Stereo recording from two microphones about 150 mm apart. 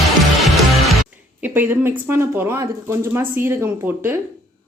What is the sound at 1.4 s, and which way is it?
Speech, 15° right (ahead or behind).